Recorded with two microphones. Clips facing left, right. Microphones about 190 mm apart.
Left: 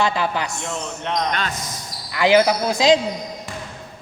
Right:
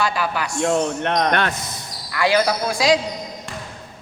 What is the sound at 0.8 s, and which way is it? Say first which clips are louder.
Speech: right 5 dB; 60° right (ahead or behind).